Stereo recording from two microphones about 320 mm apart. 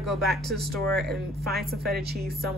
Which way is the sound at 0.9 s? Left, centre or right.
Right.